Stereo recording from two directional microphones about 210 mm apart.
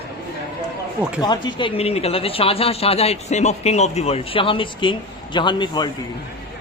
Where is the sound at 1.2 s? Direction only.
20° left (ahead or behind).